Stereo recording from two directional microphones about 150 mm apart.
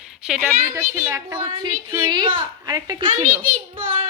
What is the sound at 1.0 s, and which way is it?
Speech, 15° right (ahead or behind).